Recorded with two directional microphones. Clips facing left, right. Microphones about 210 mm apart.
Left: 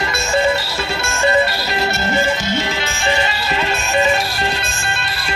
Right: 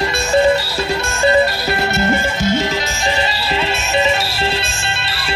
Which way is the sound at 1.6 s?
50° right (ahead or behind).